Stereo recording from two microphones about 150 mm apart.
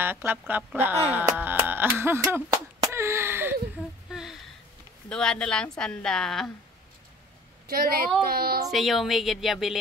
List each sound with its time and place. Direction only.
0.0 s music: 15° right (ahead or behind)
2.5 s a sound: 20° right (ahead or behind)
4.1 s a sound: 5° right (ahead or behind)
5.1 s a woman's voice: 5° left (ahead or behind)
7.6 s a woman's voice: 80° right
8.3 s speech: 90° right
8.7 s a woman's voice: centre (ahead or behind)